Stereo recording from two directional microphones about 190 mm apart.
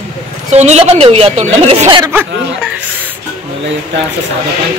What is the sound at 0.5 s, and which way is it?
A woman's voice, 35° right (ahead or behind).